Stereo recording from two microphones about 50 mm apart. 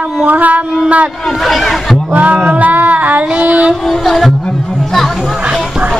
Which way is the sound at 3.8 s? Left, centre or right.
Centre.